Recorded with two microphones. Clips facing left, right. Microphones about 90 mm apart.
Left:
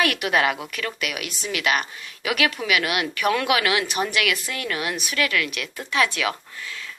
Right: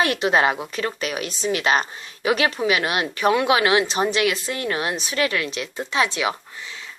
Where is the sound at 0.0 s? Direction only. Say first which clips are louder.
Right 2 dB; 25° right (ahead or behind).